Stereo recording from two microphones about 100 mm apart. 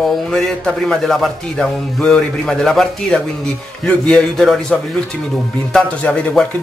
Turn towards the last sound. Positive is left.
turn(degrees=15)  # may be behind; listen again after turning